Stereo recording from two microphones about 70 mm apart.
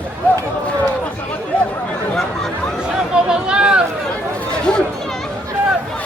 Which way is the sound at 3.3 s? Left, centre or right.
Centre.